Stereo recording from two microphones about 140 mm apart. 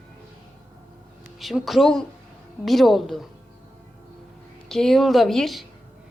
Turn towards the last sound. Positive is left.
turn(degrees=0)  # may be behind; listen again after turning